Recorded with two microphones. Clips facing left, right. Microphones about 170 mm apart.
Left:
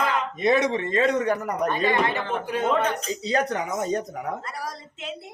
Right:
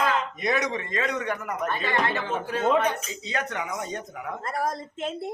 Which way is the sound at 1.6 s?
15° left (ahead or behind).